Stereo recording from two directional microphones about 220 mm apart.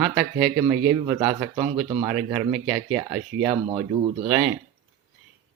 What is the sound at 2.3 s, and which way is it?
Speech, 5° right (ahead or behind).